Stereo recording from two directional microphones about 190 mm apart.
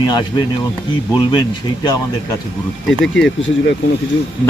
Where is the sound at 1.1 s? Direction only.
20° left (ahead or behind).